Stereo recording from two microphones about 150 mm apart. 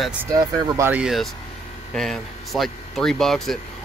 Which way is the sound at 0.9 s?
5° right (ahead or behind).